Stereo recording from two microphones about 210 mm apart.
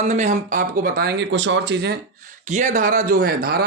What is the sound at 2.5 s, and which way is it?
Speech, 35° right (ahead or behind).